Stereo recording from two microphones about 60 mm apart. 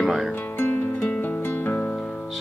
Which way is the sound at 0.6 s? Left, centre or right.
Left.